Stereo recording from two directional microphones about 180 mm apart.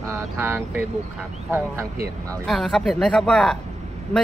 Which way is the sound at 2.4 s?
Centre (ahead or behind).